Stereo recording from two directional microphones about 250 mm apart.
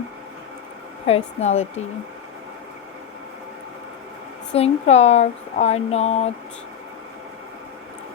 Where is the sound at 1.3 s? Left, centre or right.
Left.